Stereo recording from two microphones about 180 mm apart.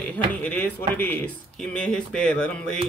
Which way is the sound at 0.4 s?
10° left (ahead or behind).